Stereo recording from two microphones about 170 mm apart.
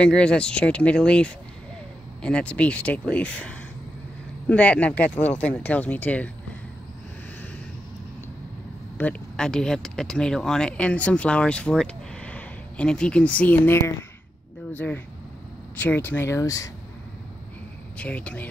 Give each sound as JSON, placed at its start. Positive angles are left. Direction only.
{"t": 0.0, "sound": "speech", "side_deg": 5}
{"t": 8.9, "sound": "speech", "side_deg": 5}
{"t": 17.9, "sound": "speech", "side_deg": 5}